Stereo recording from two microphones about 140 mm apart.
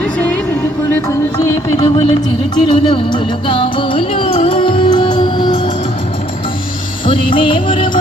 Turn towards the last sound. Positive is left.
turn(degrees=35)  # may be behind; listen again after turning